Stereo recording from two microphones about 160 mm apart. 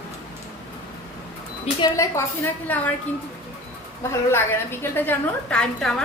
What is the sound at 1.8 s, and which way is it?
Speech, 20° left (ahead or behind).